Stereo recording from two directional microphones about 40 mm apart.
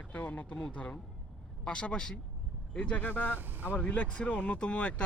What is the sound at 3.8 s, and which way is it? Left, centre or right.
A man's voice, left.